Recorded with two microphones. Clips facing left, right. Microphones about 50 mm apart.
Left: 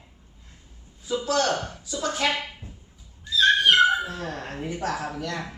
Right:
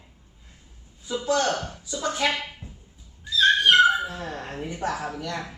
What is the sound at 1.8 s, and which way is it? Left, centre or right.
Speech, centre.